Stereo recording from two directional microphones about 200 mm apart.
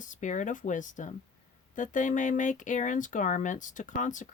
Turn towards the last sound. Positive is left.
turn(degrees=40)  # may be behind; listen again after turning